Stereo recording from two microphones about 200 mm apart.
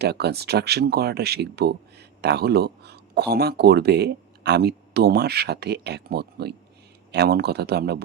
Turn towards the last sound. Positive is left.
turn(degrees=-55)  # may be behind; listen again after turning